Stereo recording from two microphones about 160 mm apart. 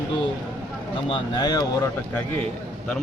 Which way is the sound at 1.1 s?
25° left (ahead or behind).